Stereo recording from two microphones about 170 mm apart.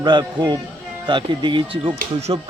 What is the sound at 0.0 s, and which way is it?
Speech, 25° right (ahead or behind).